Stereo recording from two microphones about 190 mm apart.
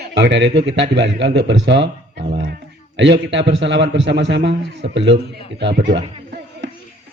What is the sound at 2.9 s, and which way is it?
A man's voice, 70° right (ahead or behind).